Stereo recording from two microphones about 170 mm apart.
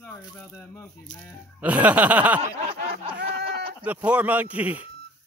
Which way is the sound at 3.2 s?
75° right (ahead or behind).